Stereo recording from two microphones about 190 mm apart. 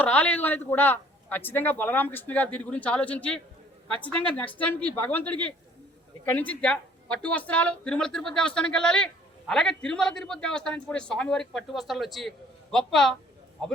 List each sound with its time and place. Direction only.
0.0 s a man's voice: 10° left (ahead or behind)